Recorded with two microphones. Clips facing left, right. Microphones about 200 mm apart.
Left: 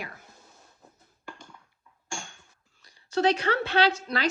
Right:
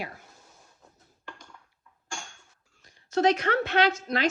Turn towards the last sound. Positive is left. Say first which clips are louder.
# even
turn(degrees=35)  # may be behind; listen again after turning